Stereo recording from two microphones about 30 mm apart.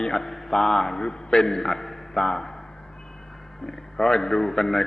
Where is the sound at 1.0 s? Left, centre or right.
Left; by 2.1 s centre.